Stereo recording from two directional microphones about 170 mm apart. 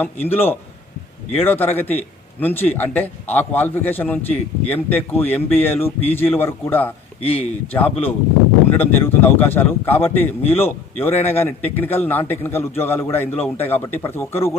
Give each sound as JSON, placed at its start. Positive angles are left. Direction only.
{"t": 0.0, "sound": "a man's voice", "side_deg": 10}
{"t": 7.2, "sound": "speech", "side_deg": 35}
{"t": 7.7, "sound": "a man's voice", "side_deg": 10}